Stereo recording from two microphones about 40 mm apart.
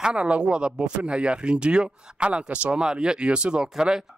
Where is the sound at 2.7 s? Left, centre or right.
Right.